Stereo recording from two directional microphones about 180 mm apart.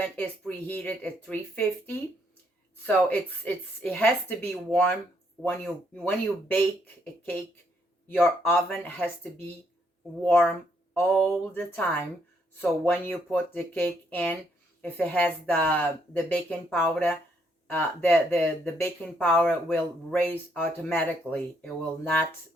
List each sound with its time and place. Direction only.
0.0 s speech: 10° left (ahead or behind)
8.1 s speech: 5° left (ahead or behind)
10.2 s speech: 10° left (ahead or behind)